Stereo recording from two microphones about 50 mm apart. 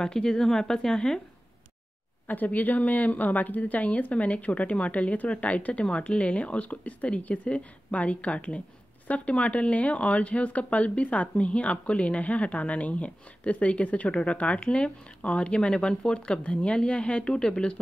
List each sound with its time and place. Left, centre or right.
0.0 s speech: centre
2.2 s speech: left; by 17.7 s centre